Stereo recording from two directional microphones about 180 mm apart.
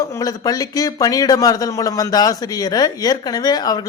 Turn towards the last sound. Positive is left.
turn(degrees=20)  # may be behind; listen again after turning